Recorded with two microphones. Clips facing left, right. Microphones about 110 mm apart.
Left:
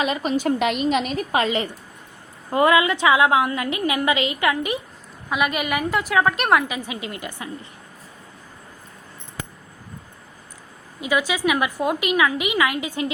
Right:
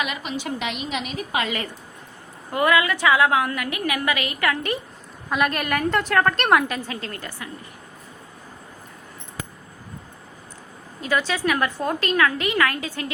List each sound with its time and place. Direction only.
0.0 s a woman's voice: 35° left (ahead or behind)
2.5 s a woman's voice: 25° left (ahead or behind)
5.3 s a woman's voice: 5° left (ahead or behind)
11.0 s a woman's voice: 10° left (ahead or behind)